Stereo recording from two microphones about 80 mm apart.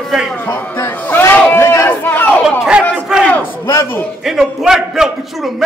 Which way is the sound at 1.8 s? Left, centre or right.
Left.